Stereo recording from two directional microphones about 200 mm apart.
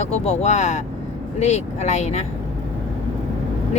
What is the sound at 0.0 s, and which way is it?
Speech, 35° left (ahead or behind).